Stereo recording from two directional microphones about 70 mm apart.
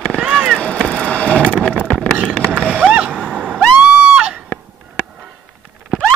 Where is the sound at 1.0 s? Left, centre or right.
Centre.